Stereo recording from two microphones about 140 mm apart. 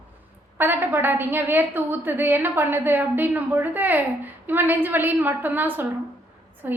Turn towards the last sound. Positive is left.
turn(degrees=-10)  # may be behind; listen again after turning